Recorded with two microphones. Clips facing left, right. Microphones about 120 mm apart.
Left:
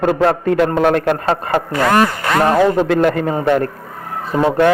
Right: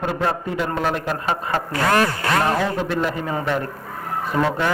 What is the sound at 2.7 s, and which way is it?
Speech, 70° left (ahead or behind).